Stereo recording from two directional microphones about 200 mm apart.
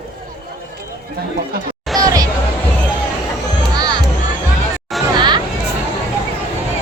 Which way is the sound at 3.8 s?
20° right (ahead or behind).